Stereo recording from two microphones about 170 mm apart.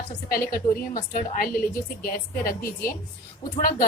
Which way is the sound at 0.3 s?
60° left (ahead or behind).